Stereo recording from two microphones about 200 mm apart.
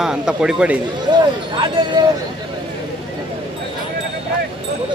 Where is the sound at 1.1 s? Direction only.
20° right (ahead or behind).